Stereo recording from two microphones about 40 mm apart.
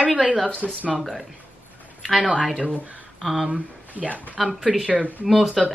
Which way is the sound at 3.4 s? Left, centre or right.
Right.